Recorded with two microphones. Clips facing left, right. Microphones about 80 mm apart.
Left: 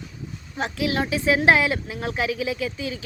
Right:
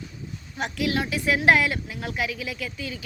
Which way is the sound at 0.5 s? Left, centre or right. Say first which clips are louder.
Left 2 dB; left.